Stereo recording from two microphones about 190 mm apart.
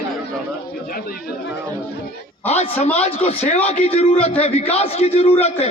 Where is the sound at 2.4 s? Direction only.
35° left (ahead or behind).